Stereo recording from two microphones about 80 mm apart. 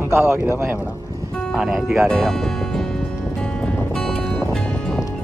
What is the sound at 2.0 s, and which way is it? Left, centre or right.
Speech, centre.